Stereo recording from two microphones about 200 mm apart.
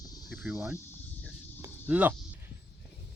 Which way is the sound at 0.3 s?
5° right (ahead or behind).